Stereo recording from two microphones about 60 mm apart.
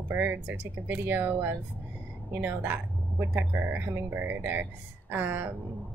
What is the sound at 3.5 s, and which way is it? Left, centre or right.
Speech, right.